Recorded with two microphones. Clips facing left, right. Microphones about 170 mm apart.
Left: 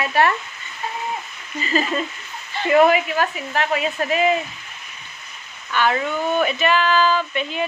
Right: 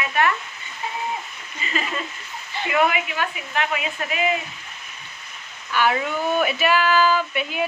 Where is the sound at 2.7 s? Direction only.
40° left (ahead or behind).